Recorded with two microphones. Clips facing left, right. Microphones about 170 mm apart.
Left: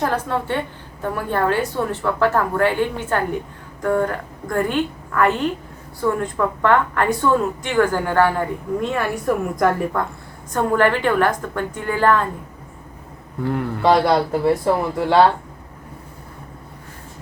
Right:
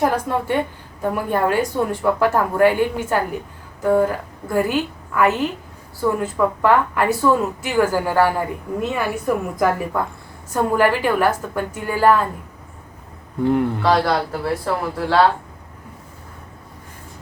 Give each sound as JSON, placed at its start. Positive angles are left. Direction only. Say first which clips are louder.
{"t": 0.0, "sound": "a woman's voice", "louder": "right 2 dB", "side_deg": -10}
{"t": 13.4, "sound": "a man's voice", "louder": "right 5 dB", "side_deg": -20}
{"t": 13.8, "sound": "speech", "louder": "left 8 dB", "side_deg": 20}